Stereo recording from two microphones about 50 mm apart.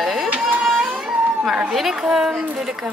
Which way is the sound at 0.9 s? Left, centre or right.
Right.